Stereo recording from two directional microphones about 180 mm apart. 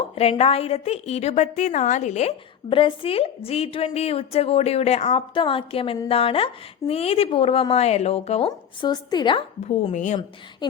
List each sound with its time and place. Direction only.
0.2 s a woman's voice: 35° left (ahead or behind)
9.9 s a woman's voice: 45° left (ahead or behind)
10.6 s speech: 25° left (ahead or behind)